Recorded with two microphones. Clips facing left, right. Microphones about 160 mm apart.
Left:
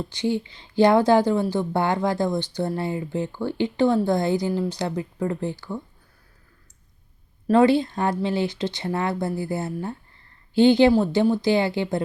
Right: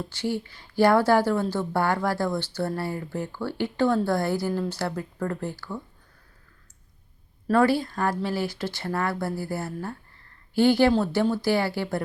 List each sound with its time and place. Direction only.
0.0 s speech: 15° left (ahead or behind)
7.4 s speech: 20° left (ahead or behind)